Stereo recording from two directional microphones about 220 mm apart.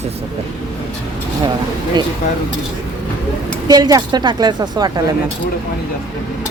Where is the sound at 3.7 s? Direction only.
15° right (ahead or behind).